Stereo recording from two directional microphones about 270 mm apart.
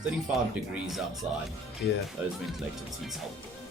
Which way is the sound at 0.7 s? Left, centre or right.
Centre.